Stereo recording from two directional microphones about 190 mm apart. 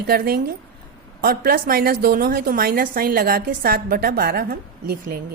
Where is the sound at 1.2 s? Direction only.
50° right (ahead or behind).